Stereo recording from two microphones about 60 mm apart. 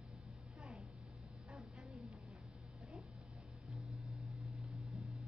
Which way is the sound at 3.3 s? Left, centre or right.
Centre.